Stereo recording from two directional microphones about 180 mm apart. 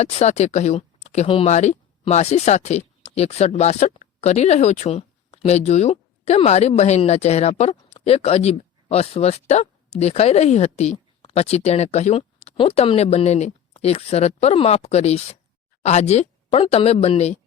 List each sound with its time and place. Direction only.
0.0 s speech: 40° left (ahead or behind)